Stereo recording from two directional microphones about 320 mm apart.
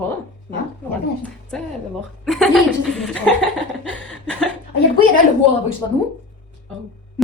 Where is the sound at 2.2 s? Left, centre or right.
Centre.